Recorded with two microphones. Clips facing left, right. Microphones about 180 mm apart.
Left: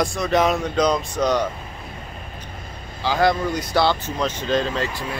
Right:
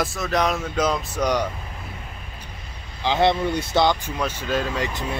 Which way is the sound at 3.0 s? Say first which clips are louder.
Even; 25° right (ahead or behind).